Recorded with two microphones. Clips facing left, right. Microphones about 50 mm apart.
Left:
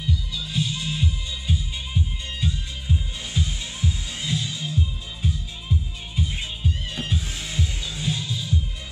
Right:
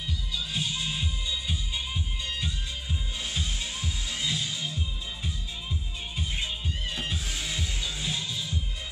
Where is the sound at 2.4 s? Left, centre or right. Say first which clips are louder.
Left 5 dB; centre.